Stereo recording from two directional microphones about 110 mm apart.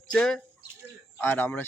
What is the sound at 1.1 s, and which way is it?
Speech, 20° left (ahead or behind).